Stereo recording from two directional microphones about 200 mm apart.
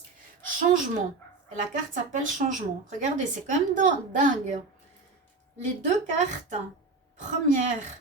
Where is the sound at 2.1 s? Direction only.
40° right (ahead or behind).